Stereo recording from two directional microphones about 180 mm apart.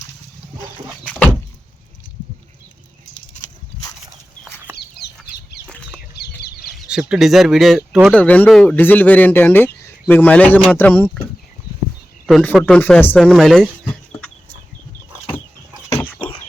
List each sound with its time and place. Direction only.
4.4 s chicken: 10° right (ahead or behind)
4.8 s chicken: 65° left (ahead or behind)
6.7 s speech: 5° right (ahead or behind)
8.1 s speech: 5° left (ahead or behind)
12.2 s speech: centre (ahead or behind)
13.1 s chicken: centre (ahead or behind)
15.9 s chicken: 10° left (ahead or behind)